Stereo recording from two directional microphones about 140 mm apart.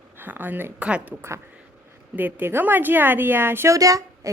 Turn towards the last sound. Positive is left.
turn(degrees=-25)  # may be behind; listen again after turning